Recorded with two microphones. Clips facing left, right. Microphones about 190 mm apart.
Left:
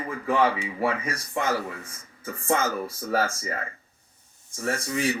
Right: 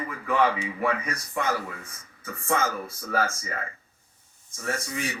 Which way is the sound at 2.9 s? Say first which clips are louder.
Even; 35° left (ahead or behind).